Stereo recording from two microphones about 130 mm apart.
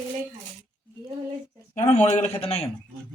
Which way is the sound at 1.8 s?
60° left (ahead or behind).